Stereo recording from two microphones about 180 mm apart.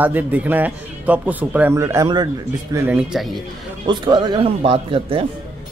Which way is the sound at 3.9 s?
25° right (ahead or behind).